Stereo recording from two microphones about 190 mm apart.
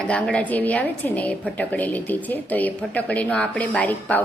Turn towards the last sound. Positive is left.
turn(degrees=10)  # may be behind; listen again after turning